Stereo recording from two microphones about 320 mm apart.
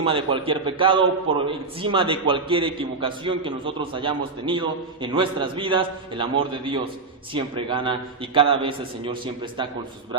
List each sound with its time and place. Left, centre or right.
0.0 s a man's voice: centre